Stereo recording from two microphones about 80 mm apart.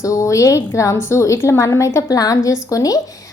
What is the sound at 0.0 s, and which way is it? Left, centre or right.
A woman's voice, left.